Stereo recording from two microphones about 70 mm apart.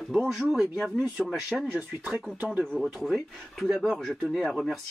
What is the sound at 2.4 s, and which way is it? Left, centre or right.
Speech, right.